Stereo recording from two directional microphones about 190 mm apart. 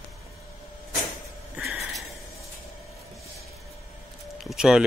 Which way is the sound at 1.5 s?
5° right (ahead or behind).